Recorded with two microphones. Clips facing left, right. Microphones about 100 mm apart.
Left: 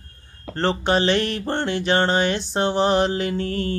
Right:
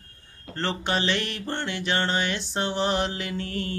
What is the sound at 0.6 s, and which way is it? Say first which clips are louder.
Music: left 7 dB; 40° left (ahead or behind).